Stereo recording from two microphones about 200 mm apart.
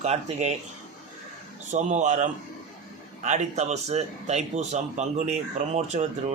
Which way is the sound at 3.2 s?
35° right (ahead or behind).